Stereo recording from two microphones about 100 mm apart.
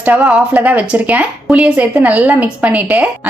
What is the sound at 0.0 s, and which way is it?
A woman's voice, 15° right (ahead or behind).